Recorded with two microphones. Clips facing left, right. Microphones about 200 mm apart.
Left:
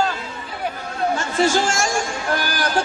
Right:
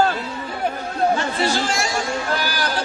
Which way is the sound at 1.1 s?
45° left (ahead or behind).